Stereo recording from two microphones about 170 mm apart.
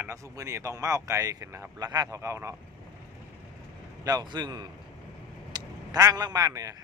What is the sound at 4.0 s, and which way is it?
Speech, 20° right (ahead or behind).